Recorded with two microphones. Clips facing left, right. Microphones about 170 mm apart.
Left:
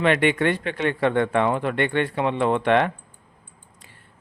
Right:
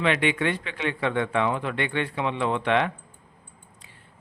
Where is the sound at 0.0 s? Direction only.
50° left (ahead or behind).